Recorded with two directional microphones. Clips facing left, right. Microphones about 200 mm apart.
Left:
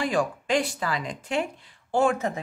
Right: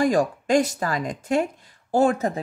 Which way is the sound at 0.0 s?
45° right (ahead or behind).